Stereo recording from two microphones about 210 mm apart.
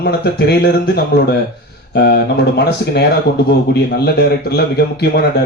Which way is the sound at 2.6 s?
50° left (ahead or behind).